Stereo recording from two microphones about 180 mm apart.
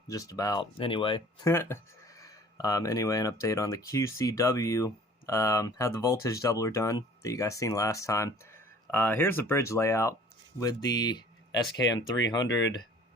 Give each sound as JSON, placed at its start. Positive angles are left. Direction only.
{"t": 0.1, "sound": "speech", "side_deg": 20}
{"t": 1.5, "sound": "speech", "side_deg": 15}